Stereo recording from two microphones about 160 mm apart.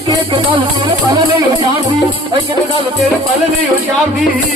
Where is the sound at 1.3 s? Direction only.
35° right (ahead or behind).